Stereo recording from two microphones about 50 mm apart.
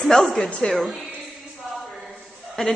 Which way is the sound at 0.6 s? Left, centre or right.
Centre.